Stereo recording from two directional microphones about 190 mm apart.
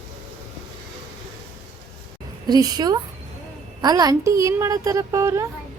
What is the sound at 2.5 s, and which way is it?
A woman's voice, 20° right (ahead or behind).